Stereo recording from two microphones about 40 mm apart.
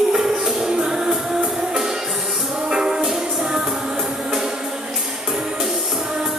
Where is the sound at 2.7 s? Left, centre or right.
Centre.